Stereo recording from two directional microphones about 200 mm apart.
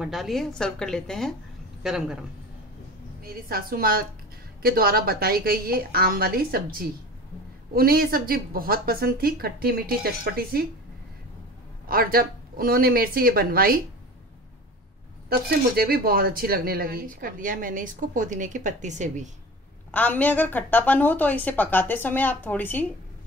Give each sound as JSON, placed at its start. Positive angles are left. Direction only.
{"t": 0.0, "sound": "a woman's voice", "side_deg": 0}
{"t": 3.2, "sound": "speech", "side_deg": -50}
{"t": 11.9, "sound": "speech", "side_deg": -50}
{"t": 15.2, "sound": "speech", "side_deg": -50}
{"t": 19.9, "sound": "a woman's voice", "side_deg": 10}